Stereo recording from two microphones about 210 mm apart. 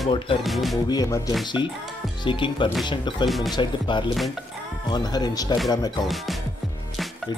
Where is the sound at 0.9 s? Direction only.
15° left (ahead or behind).